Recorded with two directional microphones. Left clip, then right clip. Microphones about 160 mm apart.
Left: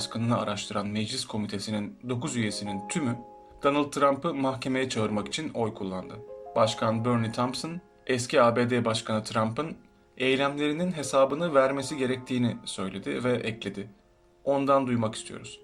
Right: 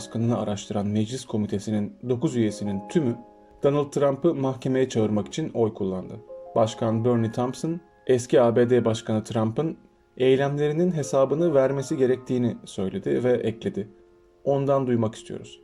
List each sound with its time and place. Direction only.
0.0 s speech: 40° right (ahead or behind)